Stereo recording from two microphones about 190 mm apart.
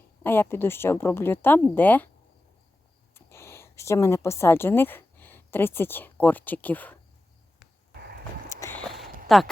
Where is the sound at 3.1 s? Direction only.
15° left (ahead or behind).